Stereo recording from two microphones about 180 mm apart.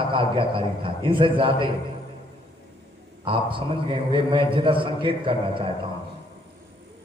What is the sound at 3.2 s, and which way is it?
A man's voice, 30° right (ahead or behind).